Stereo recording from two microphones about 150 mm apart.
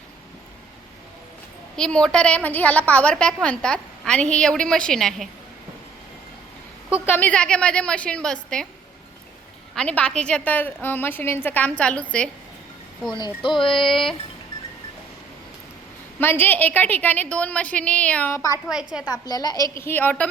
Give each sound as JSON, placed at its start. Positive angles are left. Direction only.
{"t": 1.7, "sound": "a woman's voice", "side_deg": 5}
{"t": 7.0, "sound": "a woman's voice", "side_deg": 10}
{"t": 9.7, "sound": "a woman's voice", "side_deg": 5}
{"t": 13.1, "sound": "speech", "side_deg": 30}
{"t": 13.8, "sound": "a woman's voice", "side_deg": 0}
{"t": 16.2, "sound": "a woman's voice", "side_deg": 15}
{"t": 18.7, "sound": "a woman's voice", "side_deg": -5}
{"t": 19.0, "sound": "a woman's voice", "side_deg": 25}